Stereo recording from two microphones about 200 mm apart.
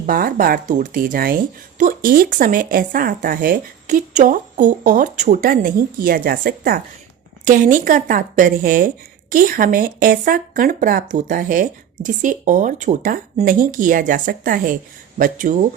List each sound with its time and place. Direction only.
0.0 s a woman's voice: 45° right (ahead or behind)